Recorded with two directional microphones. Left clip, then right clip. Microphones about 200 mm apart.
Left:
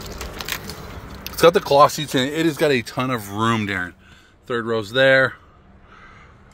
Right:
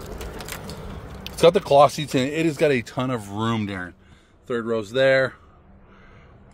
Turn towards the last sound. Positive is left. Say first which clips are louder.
# left 3 dB
turn(degrees=30)  # may be behind; listen again after turning